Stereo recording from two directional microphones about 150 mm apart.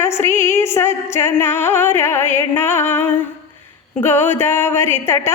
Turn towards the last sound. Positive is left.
turn(degrees=15)  # may be behind; listen again after turning